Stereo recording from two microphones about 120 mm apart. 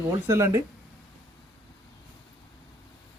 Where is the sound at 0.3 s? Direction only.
25° right (ahead or behind).